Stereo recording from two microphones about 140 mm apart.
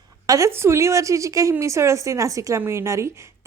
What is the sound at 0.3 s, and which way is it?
A woman's voice, 20° right (ahead or behind).